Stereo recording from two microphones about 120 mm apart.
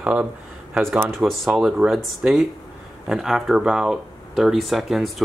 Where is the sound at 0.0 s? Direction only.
10° right (ahead or behind).